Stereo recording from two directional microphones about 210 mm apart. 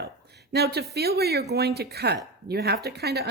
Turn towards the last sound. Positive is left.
turn(degrees=-50)  # may be behind; listen again after turning